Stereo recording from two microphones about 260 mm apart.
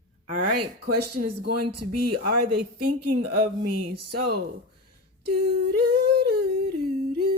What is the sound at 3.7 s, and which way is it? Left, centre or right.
Speech, right.